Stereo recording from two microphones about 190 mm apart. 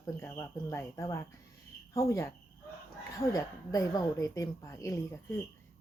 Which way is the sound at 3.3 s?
20° left (ahead or behind).